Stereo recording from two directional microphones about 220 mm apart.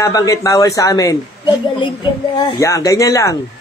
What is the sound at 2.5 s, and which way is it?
Speech, 15° left (ahead or behind).